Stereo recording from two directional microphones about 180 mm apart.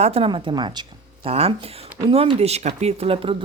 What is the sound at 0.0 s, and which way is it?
A woman's voice, 35° right (ahead or behind).